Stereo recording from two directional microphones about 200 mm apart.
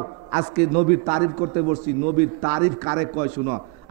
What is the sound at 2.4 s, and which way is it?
A man's voice, 20° right (ahead or behind).